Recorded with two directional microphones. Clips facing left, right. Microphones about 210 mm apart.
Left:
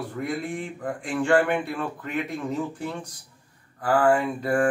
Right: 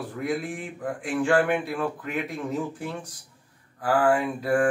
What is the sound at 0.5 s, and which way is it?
Speech, 5° right (ahead or behind).